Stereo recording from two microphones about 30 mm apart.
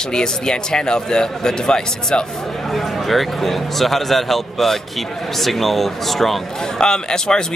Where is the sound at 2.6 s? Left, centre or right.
Centre.